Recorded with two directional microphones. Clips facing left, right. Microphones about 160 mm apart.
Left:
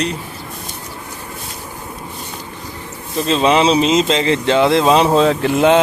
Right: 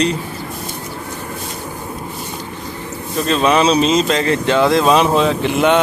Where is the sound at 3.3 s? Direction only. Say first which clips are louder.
Left 1 dB; 25° left (ahead or behind).